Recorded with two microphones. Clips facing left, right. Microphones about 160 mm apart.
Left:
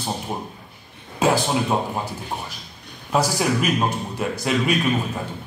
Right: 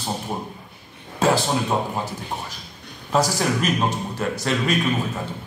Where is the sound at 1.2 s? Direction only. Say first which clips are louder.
Even; 10° left (ahead or behind).